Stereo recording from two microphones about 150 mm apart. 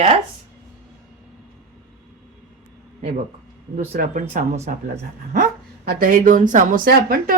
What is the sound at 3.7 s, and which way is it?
Speech, 60° right (ahead or behind).